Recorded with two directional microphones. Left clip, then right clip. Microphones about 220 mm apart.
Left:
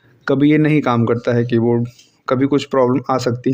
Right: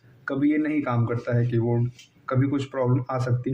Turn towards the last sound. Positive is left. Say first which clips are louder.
# left 10 dB
turn(degrees=50)  # may be behind; listen again after turning